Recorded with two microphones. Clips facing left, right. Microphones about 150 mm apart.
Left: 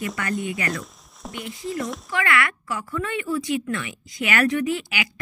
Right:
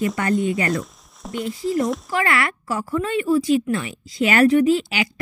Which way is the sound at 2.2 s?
30° right (ahead or behind).